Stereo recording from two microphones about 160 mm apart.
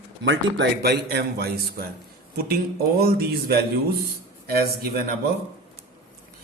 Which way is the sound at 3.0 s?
70° right (ahead or behind).